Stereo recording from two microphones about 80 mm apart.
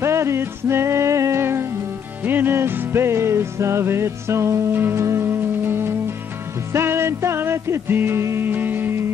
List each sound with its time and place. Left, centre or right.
0.0 s music: right